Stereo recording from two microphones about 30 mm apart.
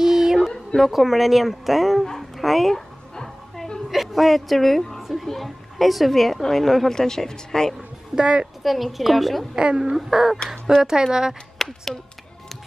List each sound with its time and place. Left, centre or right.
0.0 s a sound: centre
0.7 s a woman's voice: centre
2.1 s dog: centre
3.9 s a woman's voice: centre
6.9 s speech: centre
8.2 s a woman's voice: right
8.6 s a woman's voice: centre
9.6 s speech: right
9.9 s speech: centre
11.5 s speech: centre